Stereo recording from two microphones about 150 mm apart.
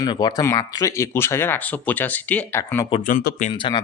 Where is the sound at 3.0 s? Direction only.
60° left (ahead or behind).